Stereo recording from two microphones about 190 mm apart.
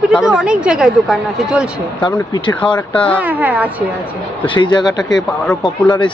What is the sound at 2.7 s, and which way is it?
Speech, 5° left (ahead or behind).